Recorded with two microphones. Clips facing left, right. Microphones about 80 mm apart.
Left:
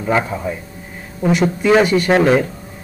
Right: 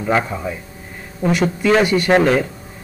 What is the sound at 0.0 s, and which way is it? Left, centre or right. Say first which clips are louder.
A man's voice: left 1 dB; centre.